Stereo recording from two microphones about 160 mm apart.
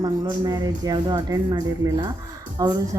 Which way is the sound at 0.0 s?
25° right (ahead or behind).